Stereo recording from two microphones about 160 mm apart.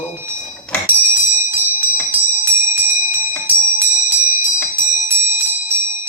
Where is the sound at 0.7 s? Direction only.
5° left (ahead or behind).